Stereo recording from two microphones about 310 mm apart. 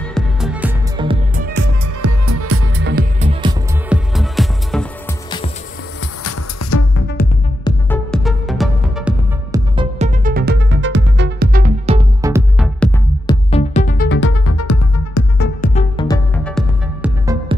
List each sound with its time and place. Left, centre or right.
0.1 s music: centre
1.0 s music: right
2.0 s music: right; by 3.5 s centre
3.9 s music: centre
6.2 s music: left
7.6 s music: centre
9.8 s music: right
12.8 s music: centre
13.5 s music: centre; by 14.8 s left
15.3 s music: left
15.7 s music: centre
16.4 s music: centre
17.5 s music: centre